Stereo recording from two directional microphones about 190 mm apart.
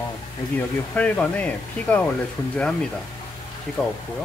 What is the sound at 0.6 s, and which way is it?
Speech, 5° left (ahead or behind).